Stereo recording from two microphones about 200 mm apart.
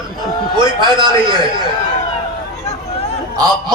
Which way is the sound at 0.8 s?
25° right (ahead or behind).